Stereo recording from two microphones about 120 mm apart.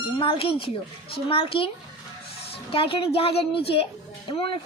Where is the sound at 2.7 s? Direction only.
50° left (ahead or behind).